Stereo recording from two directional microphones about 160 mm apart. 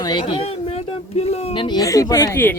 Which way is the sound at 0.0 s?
25° left (ahead or behind).